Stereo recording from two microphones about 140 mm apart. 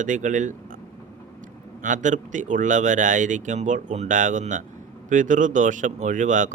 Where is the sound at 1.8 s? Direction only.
65° right (ahead or behind).